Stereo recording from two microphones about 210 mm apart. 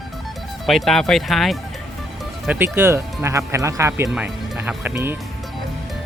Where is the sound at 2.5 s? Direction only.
10° right (ahead or behind).